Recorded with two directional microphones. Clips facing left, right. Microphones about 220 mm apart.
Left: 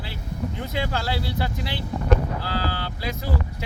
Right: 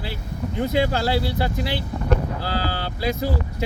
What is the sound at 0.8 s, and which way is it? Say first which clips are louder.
Speech: right 5 dB; 35° right (ahead or behind).